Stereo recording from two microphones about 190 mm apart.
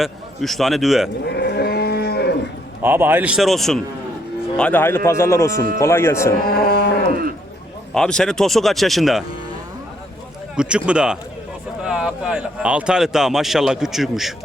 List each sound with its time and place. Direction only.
0.0 s speech: centre (ahead or behind)
1.2 s livestock: 60° left (ahead or behind)
2.8 s speech: 10° right (ahead or behind); by 6.3 s 15° left (ahead or behind)
6.4 s speech: 55° left (ahead or behind)
7.1 s speech: 50° right (ahead or behind)
7.9 s speech: 5° left (ahead or behind)
10.6 s speech: 5° right (ahead or behind)